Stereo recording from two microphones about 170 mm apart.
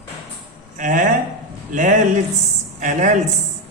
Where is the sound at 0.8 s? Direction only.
50° right (ahead or behind).